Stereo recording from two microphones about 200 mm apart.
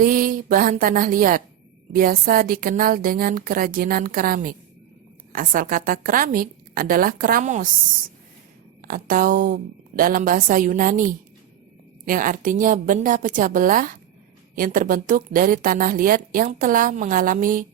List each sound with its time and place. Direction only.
0.0 s a woman's voice: 45° right (ahead or behind)